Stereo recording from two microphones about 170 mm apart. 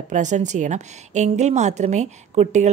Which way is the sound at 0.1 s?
45° right (ahead or behind).